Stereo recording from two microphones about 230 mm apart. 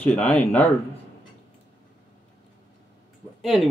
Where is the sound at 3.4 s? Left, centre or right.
Centre.